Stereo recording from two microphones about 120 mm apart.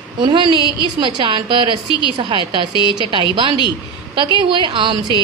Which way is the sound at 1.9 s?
40° left (ahead or behind).